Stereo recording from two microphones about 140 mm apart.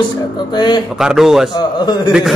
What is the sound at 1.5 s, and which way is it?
Speech, 30° left (ahead or behind).